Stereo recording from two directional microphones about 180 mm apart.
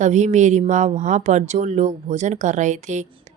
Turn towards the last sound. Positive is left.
turn(degrees=-40)  # may be behind; listen again after turning